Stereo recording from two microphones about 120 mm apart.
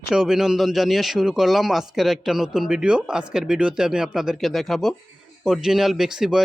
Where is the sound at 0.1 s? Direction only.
5° right (ahead or behind).